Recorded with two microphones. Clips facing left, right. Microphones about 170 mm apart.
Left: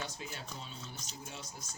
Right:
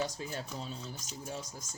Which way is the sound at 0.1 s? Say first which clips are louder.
Right 5 dB; 40° right (ahead or behind).